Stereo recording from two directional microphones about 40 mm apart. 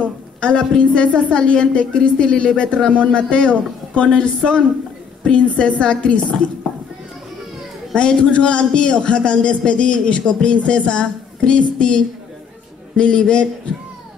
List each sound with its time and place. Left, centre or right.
0.4 s a man's voice: left
7.9 s a man's voice: left